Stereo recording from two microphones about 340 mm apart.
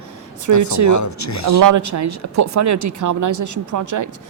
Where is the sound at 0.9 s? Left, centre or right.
Left.